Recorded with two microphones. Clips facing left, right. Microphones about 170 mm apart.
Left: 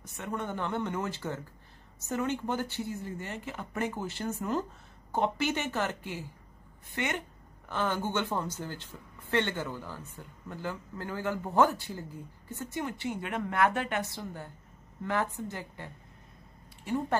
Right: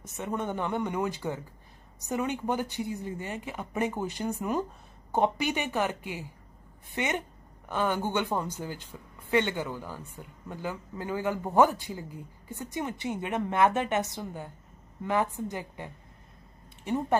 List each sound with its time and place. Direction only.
0.0 s speech: 20° right (ahead or behind)